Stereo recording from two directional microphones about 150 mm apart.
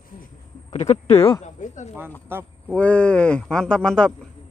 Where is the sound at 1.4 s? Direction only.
50° left (ahead or behind).